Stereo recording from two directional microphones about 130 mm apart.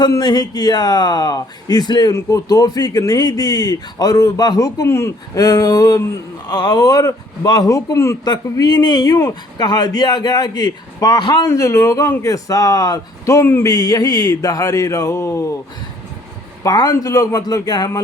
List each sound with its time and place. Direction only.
0.0 s a man's voice: 30° left (ahead or behind)
8.2 s a man's voice: 30° left (ahead or behind)
11.4 s speech: 20° left (ahead or behind)
16.6 s speech: 30° left (ahead or behind)